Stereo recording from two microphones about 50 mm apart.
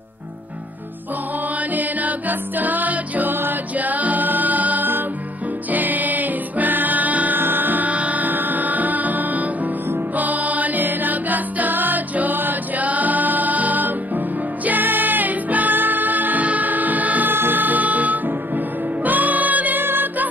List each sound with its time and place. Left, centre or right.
1.7 s music: right
7.3 s music: right
17.3 s music: right